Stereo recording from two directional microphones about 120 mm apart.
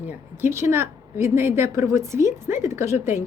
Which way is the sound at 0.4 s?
20° right (ahead or behind).